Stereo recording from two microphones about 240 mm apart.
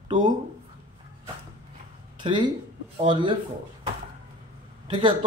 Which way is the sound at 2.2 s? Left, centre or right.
Centre.